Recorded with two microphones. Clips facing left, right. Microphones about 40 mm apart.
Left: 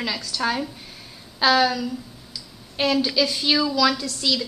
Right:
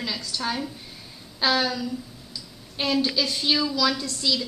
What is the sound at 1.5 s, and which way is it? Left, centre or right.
A woman's voice, centre.